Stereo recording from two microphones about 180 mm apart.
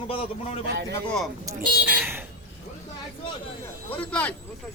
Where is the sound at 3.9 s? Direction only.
10° left (ahead or behind).